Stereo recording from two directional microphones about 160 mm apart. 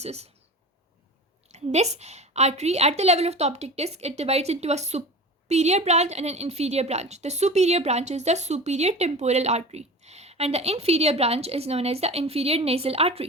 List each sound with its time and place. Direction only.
0.0 s a woman's voice: 40° right (ahead or behind)
1.5 s a woman's voice: 45° right (ahead or behind)